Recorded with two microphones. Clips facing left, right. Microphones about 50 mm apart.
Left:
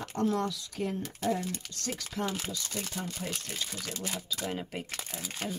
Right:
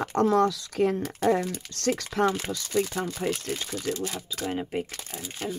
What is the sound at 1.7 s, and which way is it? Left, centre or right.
Speech, right.